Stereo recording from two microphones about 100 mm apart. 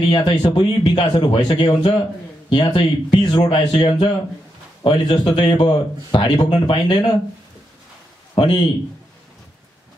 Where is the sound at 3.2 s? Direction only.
45° left (ahead or behind).